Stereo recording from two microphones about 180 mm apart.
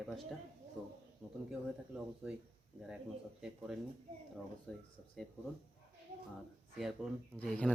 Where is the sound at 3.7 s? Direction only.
Centre (ahead or behind).